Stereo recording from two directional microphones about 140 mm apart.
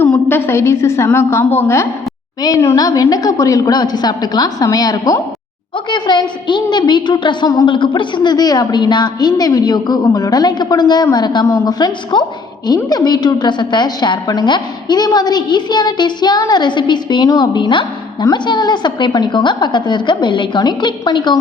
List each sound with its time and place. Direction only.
0.3 s a woman's voice: 15° left (ahead or behind); by 21.3 s 35° left (ahead or behind)